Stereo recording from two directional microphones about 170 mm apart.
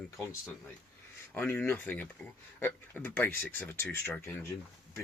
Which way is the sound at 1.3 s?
10° left (ahead or behind).